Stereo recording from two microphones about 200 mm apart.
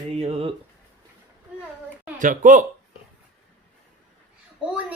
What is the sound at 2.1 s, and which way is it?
Speech, 40° right (ahead or behind).